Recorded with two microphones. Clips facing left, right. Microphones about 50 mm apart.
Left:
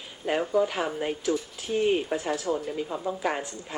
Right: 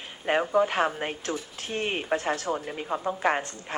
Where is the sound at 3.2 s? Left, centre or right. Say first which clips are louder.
Right 3 dB; right.